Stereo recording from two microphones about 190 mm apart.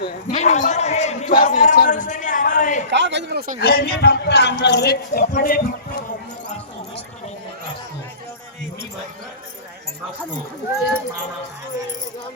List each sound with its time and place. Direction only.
0.0 s a man's voice: 35° left (ahead or behind)
1.5 s a sound: 40° left (ahead or behind)
2.9 s speech: 70° right (ahead or behind)
3.6 s speech: 50° left (ahead or behind)
5.3 s speech: 50° left (ahead or behind)